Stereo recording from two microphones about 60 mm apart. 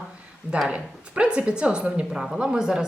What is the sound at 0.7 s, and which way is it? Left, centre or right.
A woman's voice, centre.